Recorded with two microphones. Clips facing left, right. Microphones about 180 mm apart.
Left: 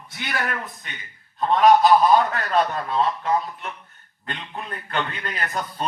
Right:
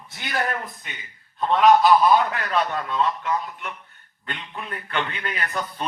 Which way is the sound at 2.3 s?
40° left (ahead or behind).